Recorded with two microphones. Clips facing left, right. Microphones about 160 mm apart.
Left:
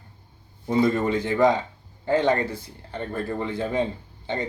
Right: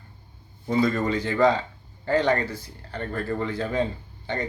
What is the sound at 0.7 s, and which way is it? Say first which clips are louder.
Speech: left 2 dB; 20° left (ahead or behind).